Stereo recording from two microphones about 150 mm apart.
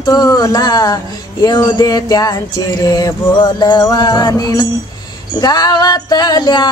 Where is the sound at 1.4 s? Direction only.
25° left (ahead or behind).